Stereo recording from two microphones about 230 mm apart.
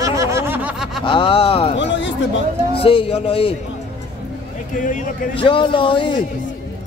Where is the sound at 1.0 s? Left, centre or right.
Left.